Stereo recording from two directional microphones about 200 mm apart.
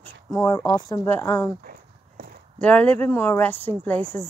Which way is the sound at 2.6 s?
5° left (ahead or behind).